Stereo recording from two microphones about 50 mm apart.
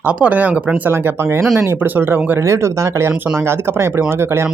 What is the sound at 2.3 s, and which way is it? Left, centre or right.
Speech, right.